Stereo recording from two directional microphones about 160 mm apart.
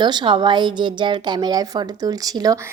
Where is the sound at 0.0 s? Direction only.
30° right (ahead or behind).